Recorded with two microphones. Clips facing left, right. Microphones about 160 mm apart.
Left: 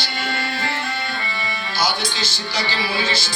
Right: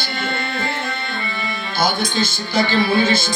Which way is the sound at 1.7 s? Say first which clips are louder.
Right 5 dB; 50° right (ahead or behind).